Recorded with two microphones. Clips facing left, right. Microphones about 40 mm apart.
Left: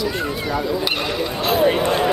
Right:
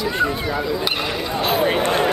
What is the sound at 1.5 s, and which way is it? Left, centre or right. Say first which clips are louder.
Speech: left 3 dB; centre.